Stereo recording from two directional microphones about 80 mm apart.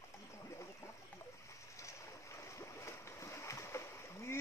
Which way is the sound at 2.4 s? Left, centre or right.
Left.